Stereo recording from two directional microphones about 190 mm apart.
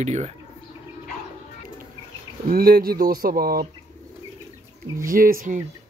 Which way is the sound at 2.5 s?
50° right (ahead or behind).